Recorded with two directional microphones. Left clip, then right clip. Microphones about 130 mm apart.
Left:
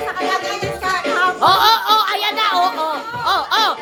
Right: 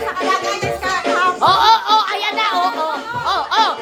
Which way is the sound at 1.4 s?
20° left (ahead or behind).